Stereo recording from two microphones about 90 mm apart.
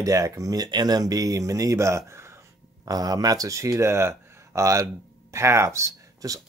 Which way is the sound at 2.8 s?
45° right (ahead or behind).